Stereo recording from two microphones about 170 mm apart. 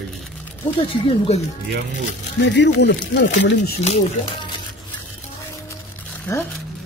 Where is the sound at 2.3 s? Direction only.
90° left.